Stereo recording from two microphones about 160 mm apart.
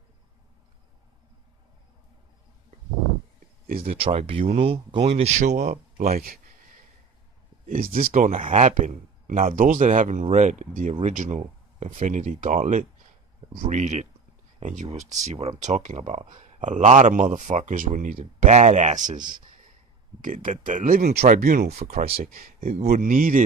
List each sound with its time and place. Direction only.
3.8 s speech: 35° right (ahead or behind); by 6.4 s 65° right (ahead or behind)
7.6 s speech: 60° right (ahead or behind)
20.2 s speech: 55° right (ahead or behind)
21.6 s speech: 45° right (ahead or behind)
22.2 s speech: 60° right (ahead or behind)